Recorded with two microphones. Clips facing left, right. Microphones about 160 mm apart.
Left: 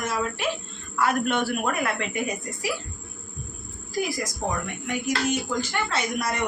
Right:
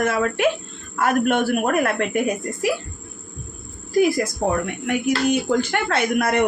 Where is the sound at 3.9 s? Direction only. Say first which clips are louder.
Right 10 dB; 60° right (ahead or behind).